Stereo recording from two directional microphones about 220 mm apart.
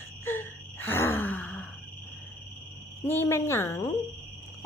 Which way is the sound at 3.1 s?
10° left (ahead or behind).